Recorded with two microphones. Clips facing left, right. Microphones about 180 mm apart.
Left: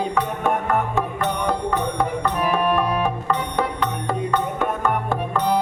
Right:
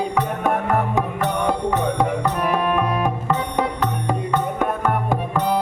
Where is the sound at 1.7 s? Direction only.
20° right (ahead or behind).